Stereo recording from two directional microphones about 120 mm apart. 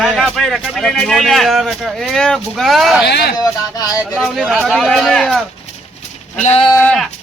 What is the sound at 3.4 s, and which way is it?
Speech, 30° left (ahead or behind).